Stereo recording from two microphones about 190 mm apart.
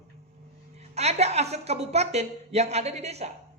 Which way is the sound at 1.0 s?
35° right (ahead or behind).